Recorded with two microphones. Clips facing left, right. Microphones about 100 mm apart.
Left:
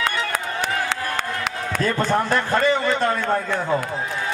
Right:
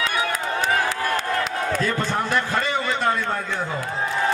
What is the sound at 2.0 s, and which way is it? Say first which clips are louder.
Speech: left 3 dB; 40° left (ahead or behind).